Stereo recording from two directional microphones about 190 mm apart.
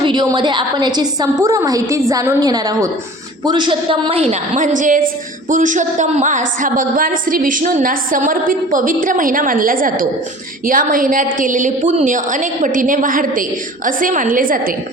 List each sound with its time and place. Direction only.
0.0 s a woman's voice: 25° right (ahead or behind); by 14.8 s 50° right (ahead or behind)